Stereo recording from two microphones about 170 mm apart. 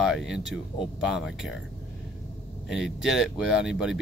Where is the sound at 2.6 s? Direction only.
5° right (ahead or behind).